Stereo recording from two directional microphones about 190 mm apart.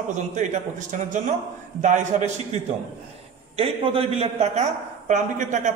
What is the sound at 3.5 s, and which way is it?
A man's voice, 30° right (ahead or behind).